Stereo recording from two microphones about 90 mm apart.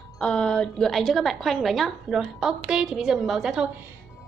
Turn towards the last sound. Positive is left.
turn(degrees=-5)  # may be behind; listen again after turning